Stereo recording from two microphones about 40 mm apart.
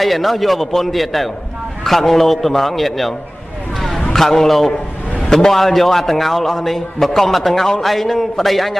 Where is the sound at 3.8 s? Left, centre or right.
Centre.